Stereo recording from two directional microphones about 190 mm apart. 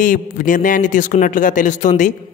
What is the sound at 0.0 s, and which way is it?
Speech, 45° left (ahead or behind).